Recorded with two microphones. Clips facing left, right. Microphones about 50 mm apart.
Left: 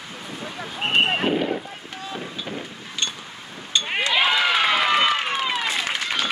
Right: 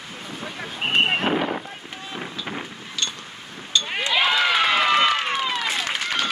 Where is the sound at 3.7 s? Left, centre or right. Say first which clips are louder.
Even; centre.